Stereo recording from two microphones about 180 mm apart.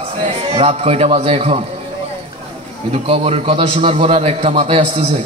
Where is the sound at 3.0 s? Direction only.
35° right (ahead or behind).